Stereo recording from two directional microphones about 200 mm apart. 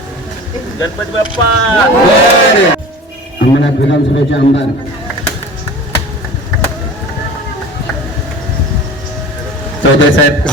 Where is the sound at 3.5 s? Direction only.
60° left (ahead or behind).